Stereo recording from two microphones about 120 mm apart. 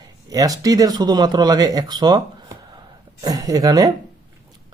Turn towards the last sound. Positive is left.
turn(degrees=-30)  # may be behind; listen again after turning